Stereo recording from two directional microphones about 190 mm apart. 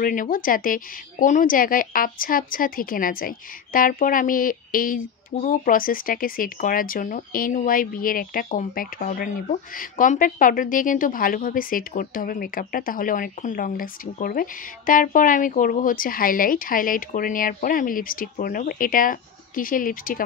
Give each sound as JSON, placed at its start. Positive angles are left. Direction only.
{"t": 0.0, "sound": "speech", "side_deg": 45}